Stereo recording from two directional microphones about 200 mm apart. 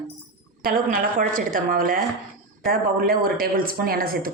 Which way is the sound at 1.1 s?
45° right (ahead or behind).